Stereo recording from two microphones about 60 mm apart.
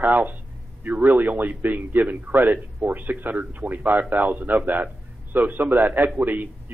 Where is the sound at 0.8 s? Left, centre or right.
Right.